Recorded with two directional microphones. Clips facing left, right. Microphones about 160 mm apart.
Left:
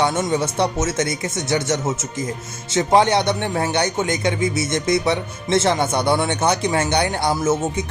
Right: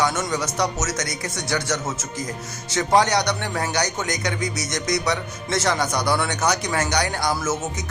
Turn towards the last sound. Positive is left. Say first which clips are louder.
# left 5 dB
turn(degrees=30)  # may be behind; listen again after turning